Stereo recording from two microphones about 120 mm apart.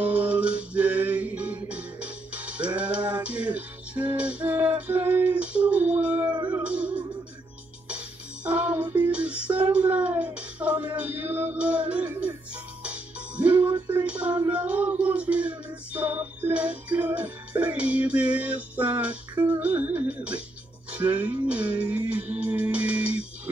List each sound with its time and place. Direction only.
0.0 s music: 10° right (ahead or behind)
8.5 s a sound: 10° right (ahead or behind)
11.0 s music: 15° right (ahead or behind)
13.7 s music: 35° right (ahead or behind)
14.0 s a sound: 10° right (ahead or behind)
14.5 s music: 10° right (ahead or behind)